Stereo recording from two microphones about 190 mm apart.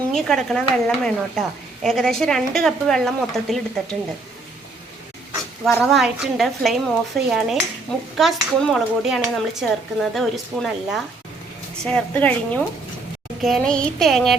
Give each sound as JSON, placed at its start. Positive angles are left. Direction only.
{"t": 0.1, "sound": "speech", "side_deg": 5}
{"t": 5.6, "sound": "speech", "side_deg": 0}